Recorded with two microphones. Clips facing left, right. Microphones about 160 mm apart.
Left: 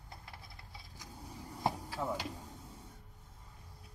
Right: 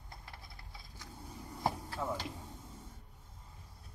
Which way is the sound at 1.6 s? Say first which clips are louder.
Even; 10° left (ahead or behind).